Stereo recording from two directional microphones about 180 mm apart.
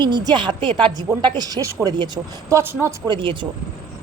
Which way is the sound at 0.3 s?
25° right (ahead or behind).